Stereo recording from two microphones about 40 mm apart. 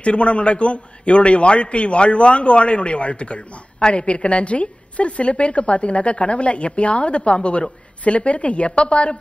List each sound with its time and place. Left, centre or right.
0.0 s a man's voice: left